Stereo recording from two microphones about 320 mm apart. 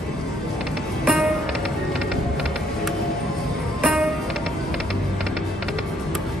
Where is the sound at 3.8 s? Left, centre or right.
Centre.